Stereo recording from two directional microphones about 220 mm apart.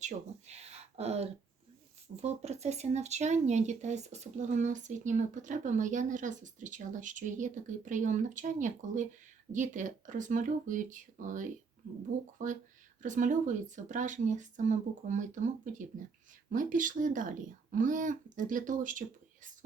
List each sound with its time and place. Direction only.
0.0 s speech: 30° right (ahead or behind)